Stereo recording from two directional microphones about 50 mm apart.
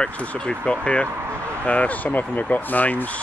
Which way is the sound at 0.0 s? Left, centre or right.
Centre.